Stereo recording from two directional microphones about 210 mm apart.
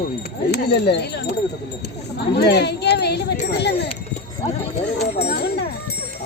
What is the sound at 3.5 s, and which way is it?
Clip-clop, 55° left (ahead or behind).